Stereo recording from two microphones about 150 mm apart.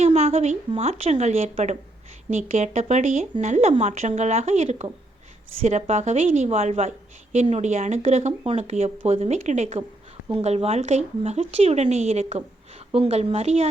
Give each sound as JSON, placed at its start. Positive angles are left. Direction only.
{"t": 0.0, "sound": "speech", "side_deg": -45}